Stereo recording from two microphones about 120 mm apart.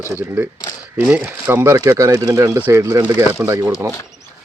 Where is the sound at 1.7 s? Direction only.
25° right (ahead or behind).